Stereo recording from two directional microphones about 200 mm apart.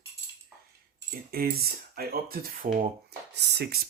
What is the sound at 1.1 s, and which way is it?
Keys jangling, 50° right (ahead or behind).